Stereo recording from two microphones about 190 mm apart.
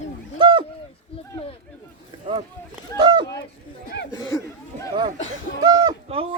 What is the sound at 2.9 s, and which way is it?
Speech, 20° right (ahead or behind).